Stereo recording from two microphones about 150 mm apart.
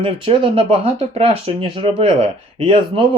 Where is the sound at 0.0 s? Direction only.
40° right (ahead or behind).